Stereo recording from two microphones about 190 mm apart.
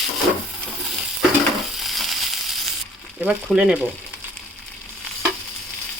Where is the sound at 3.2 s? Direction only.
5° right (ahead or behind).